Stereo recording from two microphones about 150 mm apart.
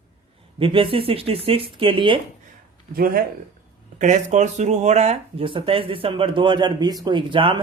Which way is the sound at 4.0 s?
50° right (ahead or behind).